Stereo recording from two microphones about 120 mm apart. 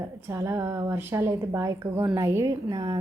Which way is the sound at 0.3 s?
25° right (ahead or behind).